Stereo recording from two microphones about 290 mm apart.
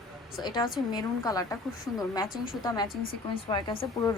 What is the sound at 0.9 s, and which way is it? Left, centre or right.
Speech, centre.